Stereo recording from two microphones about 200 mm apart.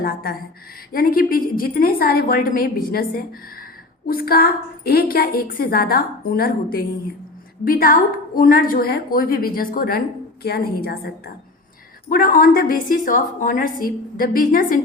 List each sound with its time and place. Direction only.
0.0 s a woman's voice: 50° left (ahead or behind)